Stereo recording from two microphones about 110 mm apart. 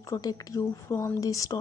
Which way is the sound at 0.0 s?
30° left (ahead or behind).